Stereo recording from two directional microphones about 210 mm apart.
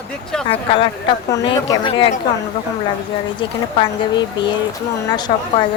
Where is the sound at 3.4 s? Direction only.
20° left (ahead or behind).